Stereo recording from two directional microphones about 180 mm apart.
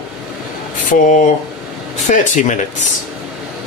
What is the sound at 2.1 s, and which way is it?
Speech, 45° left (ahead or behind).